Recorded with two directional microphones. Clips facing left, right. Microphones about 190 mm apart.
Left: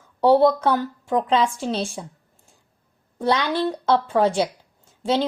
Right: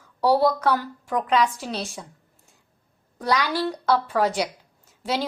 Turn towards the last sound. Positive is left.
turn(degrees=25)  # may be behind; listen again after turning